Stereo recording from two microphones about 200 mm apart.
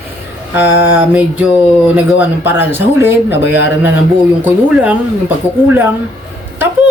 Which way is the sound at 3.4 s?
60° left (ahead or behind).